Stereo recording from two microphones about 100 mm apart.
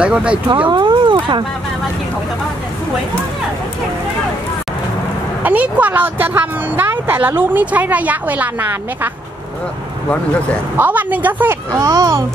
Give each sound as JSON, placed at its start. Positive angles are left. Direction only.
{"t": 0.0, "sound": "speech", "side_deg": -10}
{"t": 0.7, "sound": "speech", "side_deg": -50}
{"t": 5.4, "sound": "speech", "side_deg": -15}
{"t": 10.8, "sound": "speech", "side_deg": -15}
{"t": 11.7, "sound": "speech", "side_deg": -35}